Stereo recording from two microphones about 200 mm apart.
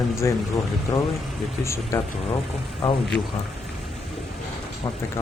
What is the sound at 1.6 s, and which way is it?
Speech, 15° left (ahead or behind).